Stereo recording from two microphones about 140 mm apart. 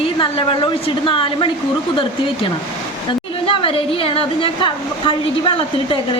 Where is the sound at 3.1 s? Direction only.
40° left (ahead or behind).